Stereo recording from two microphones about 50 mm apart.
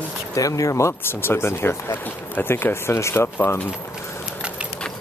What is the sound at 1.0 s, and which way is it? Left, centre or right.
Speech, left.